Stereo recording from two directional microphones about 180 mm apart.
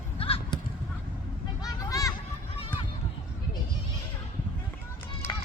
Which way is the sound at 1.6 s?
20° left (ahead or behind).